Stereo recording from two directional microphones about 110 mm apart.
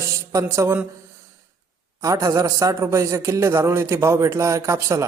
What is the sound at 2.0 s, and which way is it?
A man's voice, 30° right (ahead or behind).